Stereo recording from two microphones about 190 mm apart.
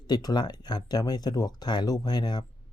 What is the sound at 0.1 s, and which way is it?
Speech, 20° left (ahead or behind).